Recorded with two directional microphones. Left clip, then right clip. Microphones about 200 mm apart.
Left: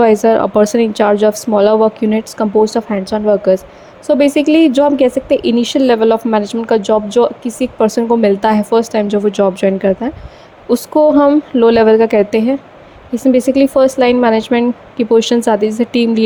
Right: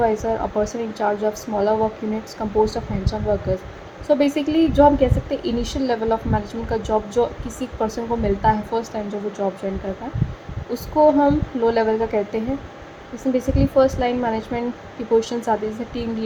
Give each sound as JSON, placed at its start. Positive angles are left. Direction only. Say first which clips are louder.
{"t": 0.0, "sound": "a woman's voice", "louder": "left 11 dB", "side_deg": 50}
{"t": 10.7, "sound": "a woman's voice", "louder": "left 6 dB", "side_deg": 45}